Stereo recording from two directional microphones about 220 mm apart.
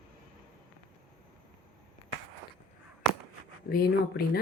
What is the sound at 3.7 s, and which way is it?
Speech, 45° left (ahead or behind).